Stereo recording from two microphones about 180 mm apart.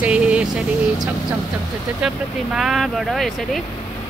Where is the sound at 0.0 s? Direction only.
5° right (ahead or behind).